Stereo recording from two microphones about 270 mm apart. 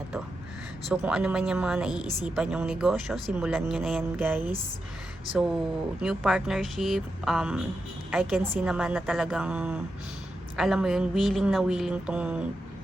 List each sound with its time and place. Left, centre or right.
0.9 s speech: centre
6.0 s speech: centre